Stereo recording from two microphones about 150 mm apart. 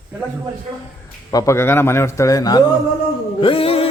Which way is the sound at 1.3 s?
20° left (ahead or behind).